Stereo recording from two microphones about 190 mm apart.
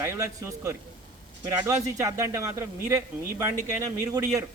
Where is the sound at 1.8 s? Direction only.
15° right (ahead or behind).